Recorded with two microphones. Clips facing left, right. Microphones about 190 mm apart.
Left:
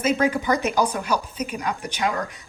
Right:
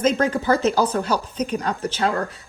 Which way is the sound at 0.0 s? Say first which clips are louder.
Right 2 dB; 10° left (ahead or behind).